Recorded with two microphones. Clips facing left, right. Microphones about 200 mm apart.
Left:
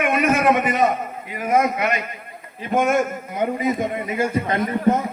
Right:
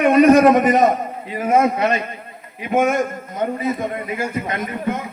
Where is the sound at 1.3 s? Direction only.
30° right (ahead or behind).